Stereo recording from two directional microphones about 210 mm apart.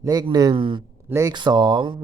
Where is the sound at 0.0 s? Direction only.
20° right (ahead or behind).